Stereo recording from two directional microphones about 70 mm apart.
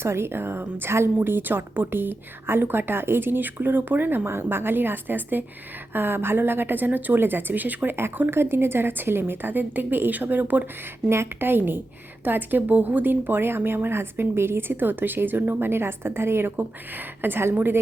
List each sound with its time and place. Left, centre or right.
0.0 s a woman's voice: right